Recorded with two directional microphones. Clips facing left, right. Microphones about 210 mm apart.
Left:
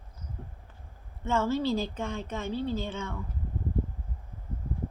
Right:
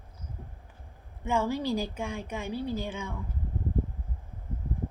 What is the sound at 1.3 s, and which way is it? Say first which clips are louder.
Speech: left 1 dB; 15° right (ahead or behind).